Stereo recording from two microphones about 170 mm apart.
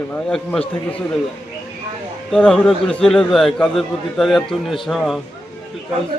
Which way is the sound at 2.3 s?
5° left (ahead or behind).